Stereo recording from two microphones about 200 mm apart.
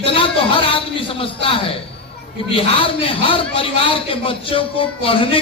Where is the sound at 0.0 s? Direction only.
25° left (ahead or behind).